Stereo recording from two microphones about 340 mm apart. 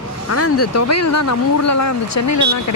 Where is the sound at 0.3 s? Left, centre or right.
Left.